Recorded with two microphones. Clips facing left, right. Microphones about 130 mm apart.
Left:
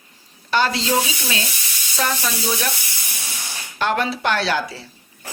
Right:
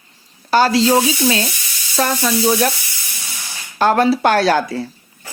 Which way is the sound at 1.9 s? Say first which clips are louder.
Right 6 dB; 50° right (ahead or behind).